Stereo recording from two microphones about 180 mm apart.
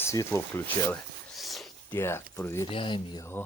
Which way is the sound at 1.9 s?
15° left (ahead or behind).